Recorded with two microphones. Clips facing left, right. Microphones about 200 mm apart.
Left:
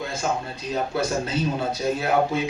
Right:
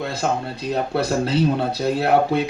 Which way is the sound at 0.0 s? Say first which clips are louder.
Right 4 dB; 60° right (ahead or behind).